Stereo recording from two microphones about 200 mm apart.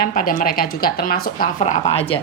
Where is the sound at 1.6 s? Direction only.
30° left (ahead or behind).